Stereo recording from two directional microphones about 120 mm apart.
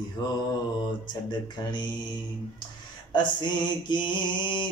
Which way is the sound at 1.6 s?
35° left (ahead or behind).